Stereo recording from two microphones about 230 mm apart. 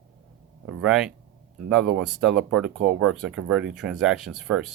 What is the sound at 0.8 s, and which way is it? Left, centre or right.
Speech, centre.